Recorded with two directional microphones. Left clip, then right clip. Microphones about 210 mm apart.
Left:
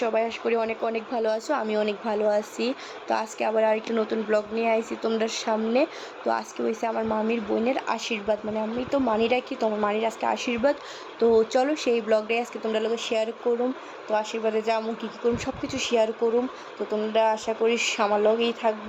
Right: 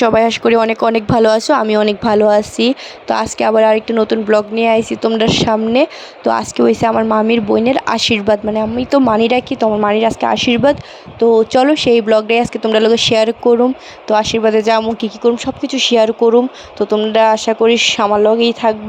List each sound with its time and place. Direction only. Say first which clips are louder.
0.0 s speech: right 14 dB; 60° right (ahead or behind)